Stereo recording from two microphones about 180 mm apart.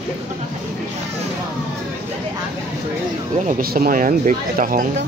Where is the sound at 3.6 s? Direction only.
55° right (ahead or behind).